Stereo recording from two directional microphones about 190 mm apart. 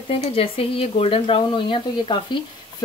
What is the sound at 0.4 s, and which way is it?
Speech, 30° left (ahead or behind).